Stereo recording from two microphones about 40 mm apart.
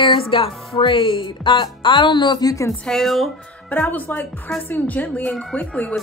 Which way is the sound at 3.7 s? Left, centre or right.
Left.